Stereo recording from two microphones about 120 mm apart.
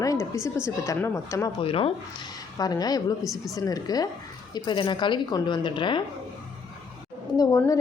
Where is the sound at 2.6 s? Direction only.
35° left (ahead or behind).